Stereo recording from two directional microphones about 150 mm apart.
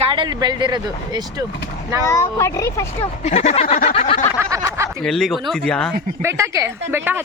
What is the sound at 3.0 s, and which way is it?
Speech, 45° left (ahead or behind).